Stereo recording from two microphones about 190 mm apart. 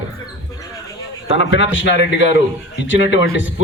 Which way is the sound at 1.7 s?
75° left (ahead or behind).